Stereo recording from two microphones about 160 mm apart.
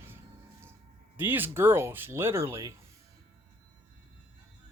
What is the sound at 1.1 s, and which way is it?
Speech, 10° right (ahead or behind).